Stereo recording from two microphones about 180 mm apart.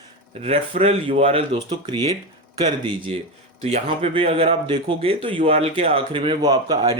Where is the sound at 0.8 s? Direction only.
35° right (ahead or behind).